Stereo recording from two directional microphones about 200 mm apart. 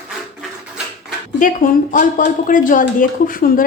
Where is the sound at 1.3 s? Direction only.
40° left (ahead or behind).